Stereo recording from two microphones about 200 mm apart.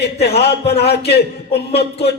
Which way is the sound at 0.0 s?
55° left (ahead or behind).